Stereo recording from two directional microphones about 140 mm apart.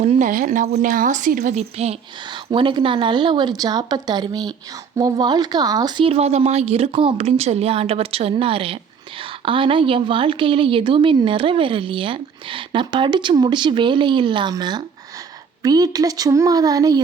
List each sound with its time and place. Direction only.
0.0 s speech: 60° right (ahead or behind)
1.5 s speech: 50° right (ahead or behind)
2.3 s speech: 35° right (ahead or behind)